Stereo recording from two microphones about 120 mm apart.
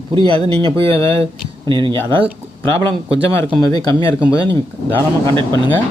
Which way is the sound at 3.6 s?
30° left (ahead or behind).